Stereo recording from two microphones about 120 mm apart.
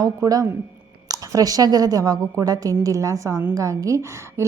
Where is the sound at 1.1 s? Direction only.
30° right (ahead or behind).